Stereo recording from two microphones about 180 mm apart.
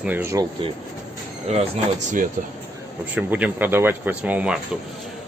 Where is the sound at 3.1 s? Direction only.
10° right (ahead or behind).